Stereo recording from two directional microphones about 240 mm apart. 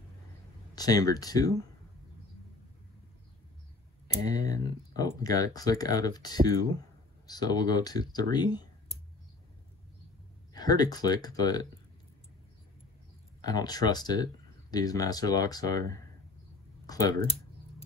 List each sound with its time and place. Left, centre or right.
0.7 s speech: centre
4.2 s speech: centre
10.5 s speech: centre
13.4 s speech: centre